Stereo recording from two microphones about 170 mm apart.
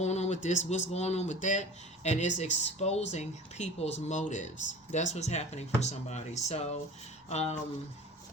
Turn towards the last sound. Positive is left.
turn(degrees=40)  # may be behind; listen again after turning